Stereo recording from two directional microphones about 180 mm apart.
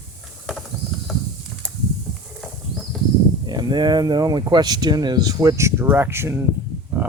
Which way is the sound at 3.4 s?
25° right (ahead or behind).